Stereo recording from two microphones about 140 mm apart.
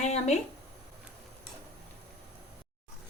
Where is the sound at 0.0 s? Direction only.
50° left (ahead or behind).